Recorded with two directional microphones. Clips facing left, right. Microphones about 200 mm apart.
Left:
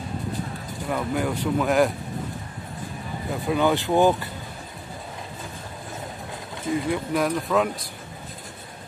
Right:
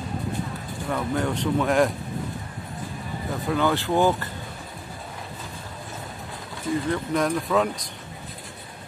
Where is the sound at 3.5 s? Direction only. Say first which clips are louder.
Left 2 dB; 15° left (ahead or behind).